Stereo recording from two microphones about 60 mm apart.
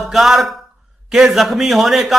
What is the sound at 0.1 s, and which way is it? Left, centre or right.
A man's voice, centre.